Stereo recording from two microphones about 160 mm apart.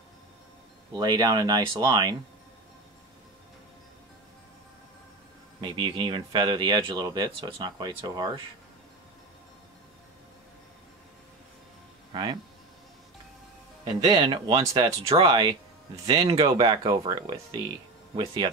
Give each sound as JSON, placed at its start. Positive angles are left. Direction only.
{"t": 0.9, "sound": "speech", "side_deg": -25}
{"t": 5.6, "sound": "speech", "side_deg": -30}
{"t": 12.1, "sound": "speech", "side_deg": -30}
{"t": 14.0, "sound": "speech", "side_deg": -30}